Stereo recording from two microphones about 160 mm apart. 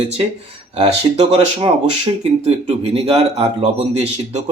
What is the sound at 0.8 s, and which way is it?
Speech, 35° right (ahead or behind).